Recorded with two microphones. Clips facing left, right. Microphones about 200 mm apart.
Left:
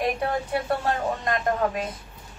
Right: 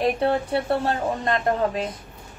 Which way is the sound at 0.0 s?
30° right (ahead or behind).